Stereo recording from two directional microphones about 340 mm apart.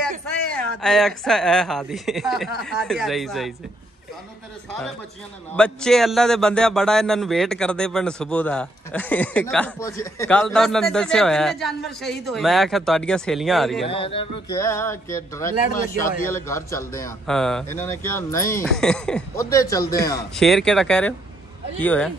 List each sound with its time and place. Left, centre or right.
0.5 s a man's voice: centre
5.6 s a man's voice: centre
13.8 s a man's voice: centre
16.0 s a man's voice: left
16.3 s a man's voice: centre